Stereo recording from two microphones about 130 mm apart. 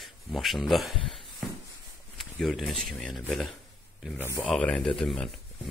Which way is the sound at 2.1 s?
Centre (ahead or behind).